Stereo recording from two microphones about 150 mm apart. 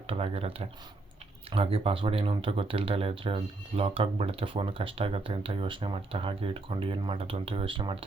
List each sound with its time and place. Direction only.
0.1 s speech: 40° right (ahead or behind)